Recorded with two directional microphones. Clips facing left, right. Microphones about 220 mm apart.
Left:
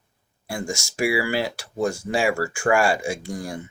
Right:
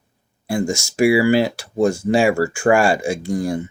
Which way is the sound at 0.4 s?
25° right (ahead or behind).